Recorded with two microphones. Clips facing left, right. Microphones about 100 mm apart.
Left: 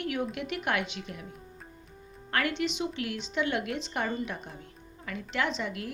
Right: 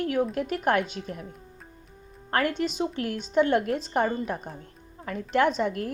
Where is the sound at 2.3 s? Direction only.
45° right (ahead or behind).